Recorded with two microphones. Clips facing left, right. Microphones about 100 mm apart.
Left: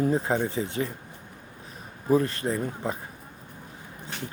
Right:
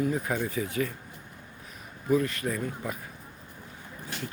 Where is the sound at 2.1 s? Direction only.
30° left (ahead or behind).